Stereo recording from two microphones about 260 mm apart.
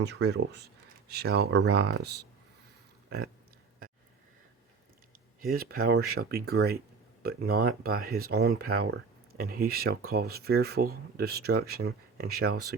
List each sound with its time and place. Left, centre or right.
0.0 s speech: right
5.4 s speech: right